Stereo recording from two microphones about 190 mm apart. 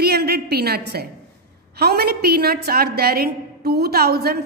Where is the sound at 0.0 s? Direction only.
55° right (ahead or behind).